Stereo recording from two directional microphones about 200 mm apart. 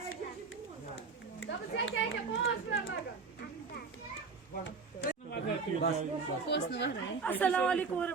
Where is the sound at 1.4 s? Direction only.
70° left (ahead or behind).